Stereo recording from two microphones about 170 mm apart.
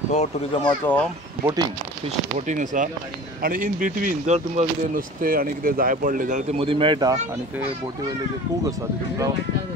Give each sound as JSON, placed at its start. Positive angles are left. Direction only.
{"t": 0.1, "sound": "speech", "side_deg": 40}
{"t": 1.4, "sound": "speech", "side_deg": -20}
{"t": 2.0, "sound": "speech", "side_deg": -45}
{"t": 6.6, "sound": "speech", "side_deg": -30}